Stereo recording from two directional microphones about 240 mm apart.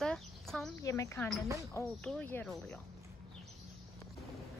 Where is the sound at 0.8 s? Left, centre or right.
Centre.